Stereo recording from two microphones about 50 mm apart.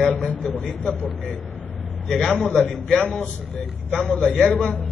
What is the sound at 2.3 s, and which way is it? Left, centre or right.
Speech, left.